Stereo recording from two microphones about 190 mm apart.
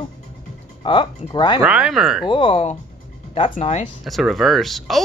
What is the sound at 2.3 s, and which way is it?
Speech, 25° left (ahead or behind).